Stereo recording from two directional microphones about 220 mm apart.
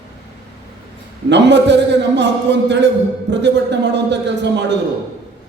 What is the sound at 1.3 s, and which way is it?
A man's voice, 55° right (ahead or behind).